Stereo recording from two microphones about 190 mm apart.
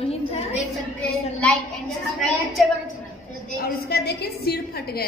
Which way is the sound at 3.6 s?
55° left (ahead or behind).